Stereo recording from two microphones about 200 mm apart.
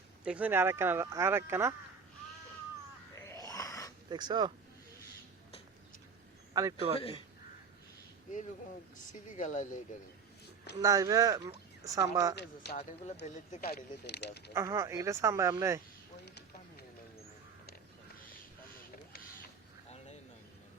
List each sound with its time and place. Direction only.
0.3 s speech: 10° right (ahead or behind)
3.2 s a sound: 15° left (ahead or behind)
4.1 s speech: 20° right (ahead or behind)
6.5 s a man's voice: 15° right (ahead or behind)
7.0 s speech: 25° left (ahead or behind)
9.3 s speech: 40° left (ahead or behind)
10.8 s speech: 15° right (ahead or behind)
12.7 s speech: 35° left (ahead or behind)
13.6 s speech: 50° left (ahead or behind)
14.5 s speech: 15° right (ahead or behind)
16.2 s a sound: 55° left (ahead or behind)